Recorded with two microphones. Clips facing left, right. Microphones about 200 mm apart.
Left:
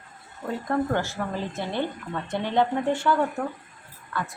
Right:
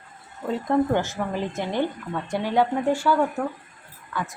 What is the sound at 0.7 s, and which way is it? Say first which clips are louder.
Speech: right 4 dB; 15° right (ahead or behind).